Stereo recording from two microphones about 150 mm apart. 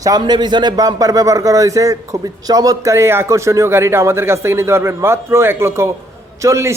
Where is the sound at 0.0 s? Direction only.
25° right (ahead or behind).